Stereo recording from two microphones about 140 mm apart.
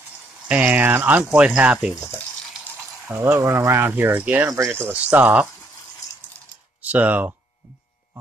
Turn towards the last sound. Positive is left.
turn(degrees=-10)  # may be behind; listen again after turning